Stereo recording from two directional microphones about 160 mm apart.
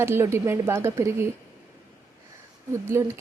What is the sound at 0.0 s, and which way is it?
A woman's voice, 15° right (ahead or behind).